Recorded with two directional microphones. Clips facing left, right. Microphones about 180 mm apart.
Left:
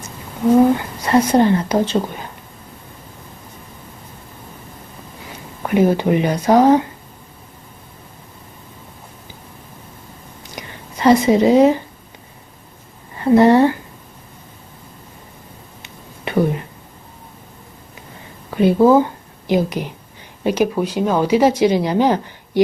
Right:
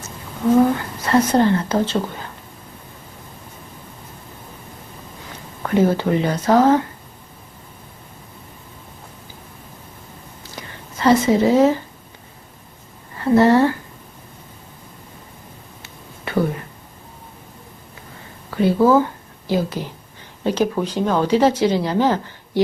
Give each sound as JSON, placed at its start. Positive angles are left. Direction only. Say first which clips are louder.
{"t": 1.0, "sound": "speech", "louder": "left 2 dB", "side_deg": 15}
{"t": 5.6, "sound": "speech", "louder": "left 2 dB", "side_deg": 15}
{"t": 10.4, "sound": "whispering", "louder": "left 3 dB", "side_deg": 15}
{"t": 13.2, "sound": "speech", "louder": "left 3 dB", "side_deg": 15}
{"t": 15.8, "sound": "a sound", "louder": "left 4 dB", "side_deg": 20}
{"t": 18.5, "sound": "speech", "louder": "left 3 dB", "side_deg": 20}